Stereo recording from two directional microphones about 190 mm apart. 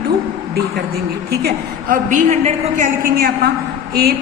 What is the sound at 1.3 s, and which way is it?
A woman's voice, 55° right (ahead or behind).